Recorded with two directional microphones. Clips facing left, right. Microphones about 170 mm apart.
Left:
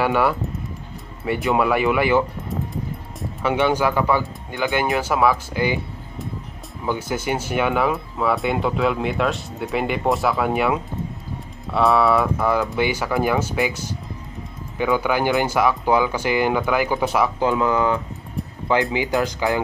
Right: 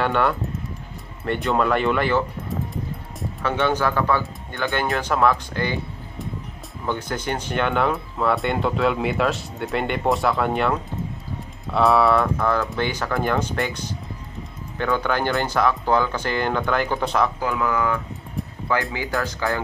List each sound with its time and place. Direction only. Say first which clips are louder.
0.0 s speech: left 2 dB; 5° left (ahead or behind)
3.4 s speech: left 2 dB; 10° left (ahead or behind)
6.9 s speech: left 2 dB; 5° left (ahead or behind)
17.4 s speech: left 4 dB; 25° left (ahead or behind)